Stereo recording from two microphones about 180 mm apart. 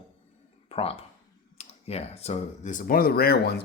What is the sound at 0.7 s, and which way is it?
Speech, 35° left (ahead or behind).